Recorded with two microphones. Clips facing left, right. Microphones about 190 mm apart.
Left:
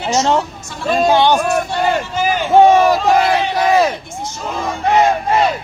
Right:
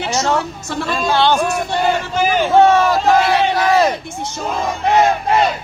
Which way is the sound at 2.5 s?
15° left (ahead or behind).